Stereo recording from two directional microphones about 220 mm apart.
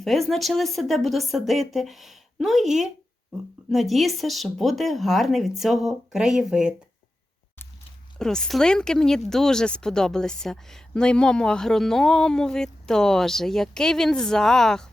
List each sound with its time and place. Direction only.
0.0 s speech: centre (ahead or behind)
8.2 s speech: centre (ahead or behind)